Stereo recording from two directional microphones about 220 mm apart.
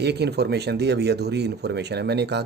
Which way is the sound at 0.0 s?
50° right (ahead or behind).